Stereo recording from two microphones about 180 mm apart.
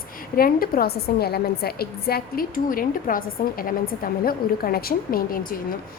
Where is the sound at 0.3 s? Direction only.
55° left (ahead or behind).